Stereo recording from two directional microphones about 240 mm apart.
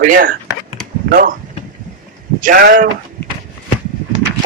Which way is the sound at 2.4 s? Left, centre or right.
Right.